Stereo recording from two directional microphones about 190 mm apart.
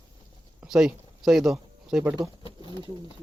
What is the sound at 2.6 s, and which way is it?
Pigeon, 25° right (ahead or behind).